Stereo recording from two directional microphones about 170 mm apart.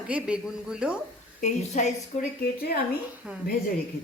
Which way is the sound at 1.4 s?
45° left (ahead or behind).